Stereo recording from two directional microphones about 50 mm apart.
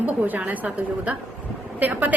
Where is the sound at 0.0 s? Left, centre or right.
Right.